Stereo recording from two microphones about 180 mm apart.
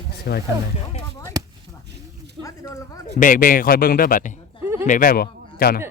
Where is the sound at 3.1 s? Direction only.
50° left (ahead or behind).